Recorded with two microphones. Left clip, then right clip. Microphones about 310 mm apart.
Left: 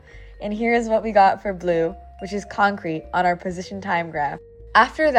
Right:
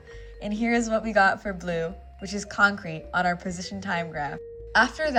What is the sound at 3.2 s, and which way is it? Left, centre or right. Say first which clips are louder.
A woman's voice: left 5 dB; centre.